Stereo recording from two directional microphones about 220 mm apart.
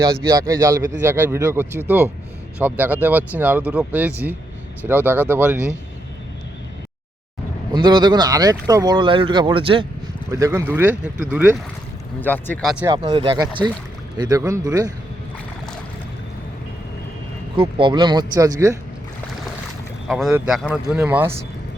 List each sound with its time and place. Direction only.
0.3 s speech: 15° right (ahead or behind)
7.7 s speech: 20° right (ahead or behind)
10.4 s speech: 10° right (ahead or behind)
12.2 s speech: 10° left (ahead or behind)
12.8 s speech: 20° right (ahead or behind)
17.6 s speech: 20° right (ahead or behind)
20.1 s speech: centre (ahead or behind)